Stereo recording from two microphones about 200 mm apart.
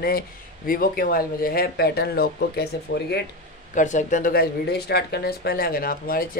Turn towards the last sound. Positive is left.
turn(degrees=45)  # may be behind; listen again after turning